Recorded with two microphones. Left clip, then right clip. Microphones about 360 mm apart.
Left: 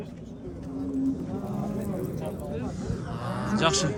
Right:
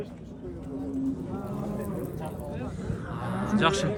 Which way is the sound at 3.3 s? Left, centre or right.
Centre.